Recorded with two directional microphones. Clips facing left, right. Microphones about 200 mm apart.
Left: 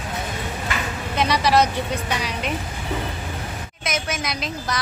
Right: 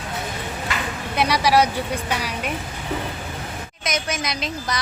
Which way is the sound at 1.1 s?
10° right (ahead or behind).